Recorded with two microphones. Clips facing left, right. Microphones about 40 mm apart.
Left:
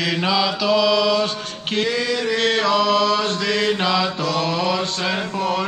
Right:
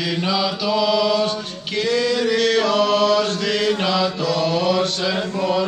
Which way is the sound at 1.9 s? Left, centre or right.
Centre.